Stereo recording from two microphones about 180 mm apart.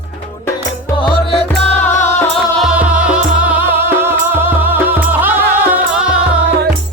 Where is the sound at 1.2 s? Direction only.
35° left (ahead or behind).